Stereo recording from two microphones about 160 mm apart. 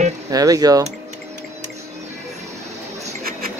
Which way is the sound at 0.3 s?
25° right (ahead or behind).